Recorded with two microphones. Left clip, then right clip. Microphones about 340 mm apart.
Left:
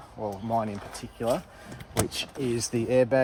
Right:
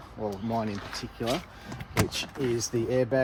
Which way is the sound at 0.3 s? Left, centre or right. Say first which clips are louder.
Left 3 dB; left.